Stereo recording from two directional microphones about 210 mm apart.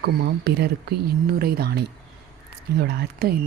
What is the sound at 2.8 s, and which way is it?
Speech, 50° right (ahead or behind).